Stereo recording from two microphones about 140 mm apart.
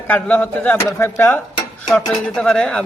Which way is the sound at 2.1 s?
5° left (ahead or behind).